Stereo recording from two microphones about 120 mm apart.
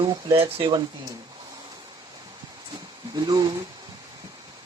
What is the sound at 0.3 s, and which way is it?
Speech, 50° right (ahead or behind).